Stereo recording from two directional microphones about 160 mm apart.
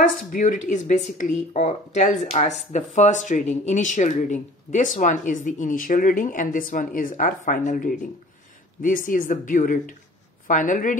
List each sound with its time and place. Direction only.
0.3 s speech: 55° left (ahead or behind)